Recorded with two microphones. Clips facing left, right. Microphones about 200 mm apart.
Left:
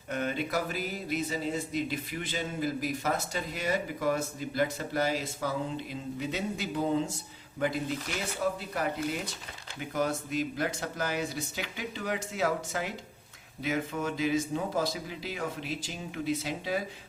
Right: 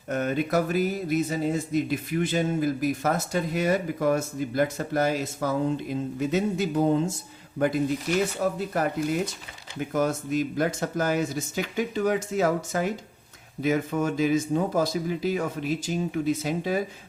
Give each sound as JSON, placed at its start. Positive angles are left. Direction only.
{"t": 0.1, "sound": "speech", "side_deg": -45}
{"t": 8.4, "sound": "speech", "side_deg": -50}
{"t": 9.9, "sound": "speech", "side_deg": -45}